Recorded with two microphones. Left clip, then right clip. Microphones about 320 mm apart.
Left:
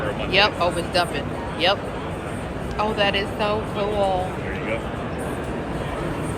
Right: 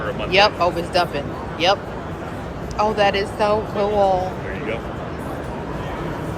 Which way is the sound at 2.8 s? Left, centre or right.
Centre.